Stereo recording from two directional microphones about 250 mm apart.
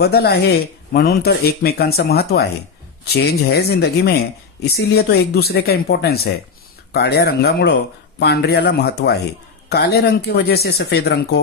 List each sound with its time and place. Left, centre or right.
0.0 s speech: left